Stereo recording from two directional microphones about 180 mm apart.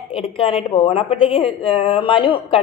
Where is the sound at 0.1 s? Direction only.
30° left (ahead or behind).